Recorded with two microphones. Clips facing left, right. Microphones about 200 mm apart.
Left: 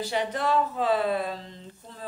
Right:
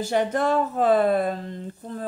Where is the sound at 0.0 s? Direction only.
50° right (ahead or behind).